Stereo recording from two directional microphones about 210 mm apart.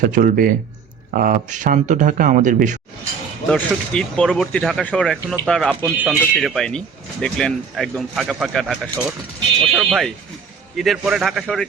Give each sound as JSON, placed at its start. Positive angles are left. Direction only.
{"t": 0.0, "sound": "speech", "side_deg": -40}
{"t": 3.5, "sound": "speech", "side_deg": 5}